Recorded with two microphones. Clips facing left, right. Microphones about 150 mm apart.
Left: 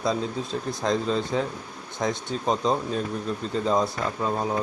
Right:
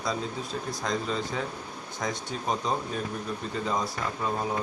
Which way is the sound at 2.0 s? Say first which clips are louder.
Left 5 dB; 25° left (ahead or behind).